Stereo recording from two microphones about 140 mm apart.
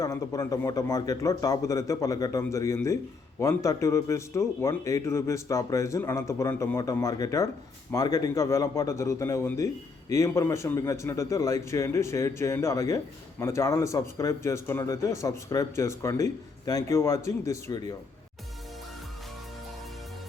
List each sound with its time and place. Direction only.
0.0 s speech: 25° left (ahead or behind)